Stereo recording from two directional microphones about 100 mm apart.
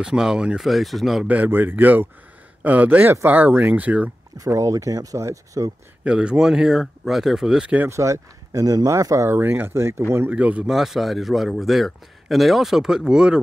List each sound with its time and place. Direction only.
0.0 s speech: 5° right (ahead or behind)
1.2 s speech: 15° right (ahead or behind)
4.4 s speech: 35° right (ahead or behind)
6.0 s speech: 10° right (ahead or behind)
7.9 s speech: 30° right (ahead or behind)
10.3 s speech: 10° right (ahead or behind)